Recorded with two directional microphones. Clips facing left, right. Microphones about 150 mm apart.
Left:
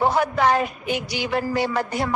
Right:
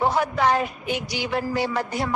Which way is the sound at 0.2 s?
60° left (ahead or behind).